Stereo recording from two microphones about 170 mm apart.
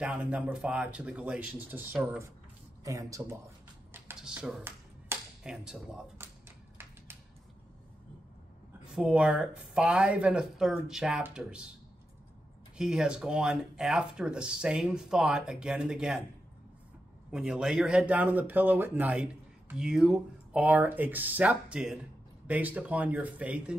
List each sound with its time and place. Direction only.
0.0 s speech: 5° right (ahead or behind)
3.9 s a sound: 10° right (ahead or behind)
5.4 s speech: 5° right (ahead or behind)
8.9 s speech: 5° right (ahead or behind)
12.7 s speech: 5° right (ahead or behind)
17.3 s speech: 5° right (ahead or behind)